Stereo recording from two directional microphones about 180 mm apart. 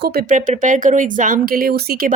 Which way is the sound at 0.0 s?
60° right (ahead or behind).